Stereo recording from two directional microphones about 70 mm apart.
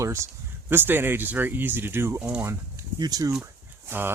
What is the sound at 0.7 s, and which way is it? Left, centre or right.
Speech, right.